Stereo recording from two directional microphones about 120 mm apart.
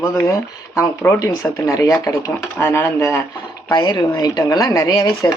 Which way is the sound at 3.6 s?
35° left (ahead or behind).